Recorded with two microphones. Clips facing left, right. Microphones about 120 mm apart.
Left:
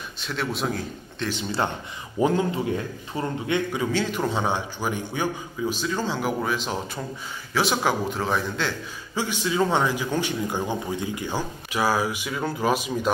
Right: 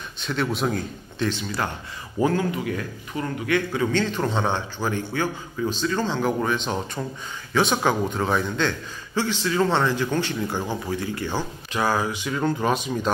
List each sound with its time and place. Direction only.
0.2 s a man's voice: centre (ahead or behind)
2.1 s a man's voice: 20° left (ahead or behind)
3.8 s a man's voice: 10° left (ahead or behind)